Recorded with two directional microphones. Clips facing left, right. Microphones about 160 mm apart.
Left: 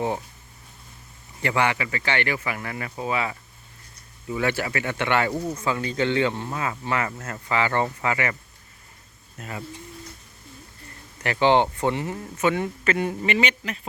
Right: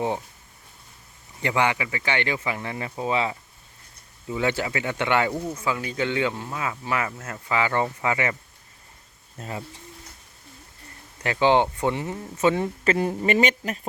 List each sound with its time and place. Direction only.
1.4 s speech: 15° right (ahead or behind)
9.4 s speech: 25° right (ahead or behind)
11.2 s speech: 15° right (ahead or behind)
12.4 s speech: 30° right (ahead or behind)